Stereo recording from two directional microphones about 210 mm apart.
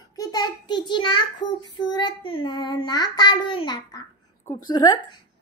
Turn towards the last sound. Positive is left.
turn(degrees=20)  # may be behind; listen again after turning